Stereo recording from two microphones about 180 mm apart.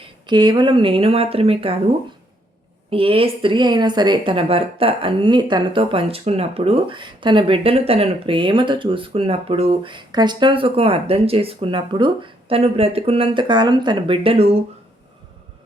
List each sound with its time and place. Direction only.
0.3 s speech: 25° right (ahead or behind)
2.9 s speech: 30° right (ahead or behind)